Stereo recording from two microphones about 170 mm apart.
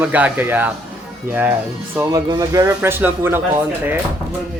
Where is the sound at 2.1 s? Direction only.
20° right (ahead or behind).